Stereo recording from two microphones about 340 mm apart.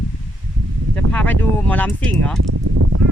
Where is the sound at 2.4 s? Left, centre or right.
Right.